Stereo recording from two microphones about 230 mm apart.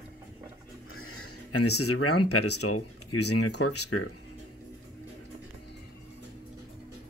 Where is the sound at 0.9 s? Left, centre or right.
Left.